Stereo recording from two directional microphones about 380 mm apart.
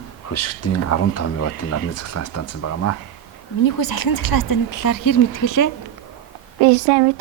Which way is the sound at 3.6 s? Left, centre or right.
Left.